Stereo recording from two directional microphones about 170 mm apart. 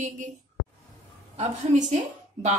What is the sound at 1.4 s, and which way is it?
A woman's voice, 45° right (ahead or behind).